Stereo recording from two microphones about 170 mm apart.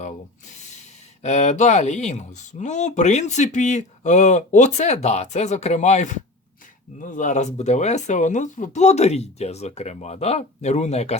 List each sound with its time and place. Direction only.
1.2 s speech: 45° left (ahead or behind)